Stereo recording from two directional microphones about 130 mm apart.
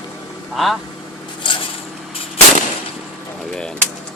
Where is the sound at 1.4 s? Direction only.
40° left (ahead or behind).